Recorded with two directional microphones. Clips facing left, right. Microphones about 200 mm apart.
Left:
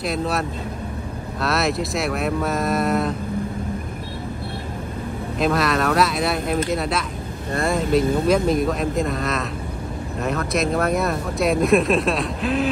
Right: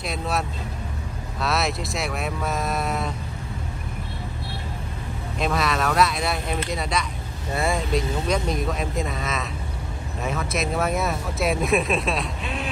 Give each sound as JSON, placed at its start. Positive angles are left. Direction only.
{"t": 0.0, "sound": "speech", "side_deg": 0}
{"t": 5.4, "sound": "speech", "side_deg": 0}
{"t": 8.0, "sound": "speech", "side_deg": 55}
{"t": 8.5, "sound": "speech", "side_deg": 0}